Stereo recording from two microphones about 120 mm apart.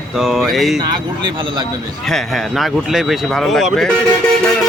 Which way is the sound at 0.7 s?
40° right (ahead or behind).